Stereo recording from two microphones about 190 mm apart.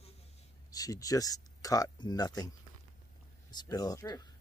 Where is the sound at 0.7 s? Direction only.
20° left (ahead or behind).